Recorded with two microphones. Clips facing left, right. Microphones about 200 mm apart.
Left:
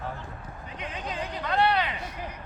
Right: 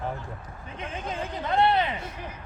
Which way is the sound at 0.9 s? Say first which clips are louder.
Right 3 dB; 50° right (ahead or behind).